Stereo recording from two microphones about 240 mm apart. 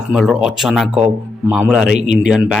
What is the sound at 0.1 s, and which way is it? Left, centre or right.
Speech, centre.